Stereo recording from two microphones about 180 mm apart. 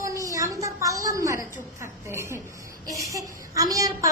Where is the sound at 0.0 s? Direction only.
20° right (ahead or behind).